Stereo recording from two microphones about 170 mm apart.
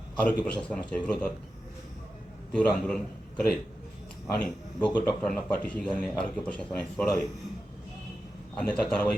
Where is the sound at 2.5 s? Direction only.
5° left (ahead or behind).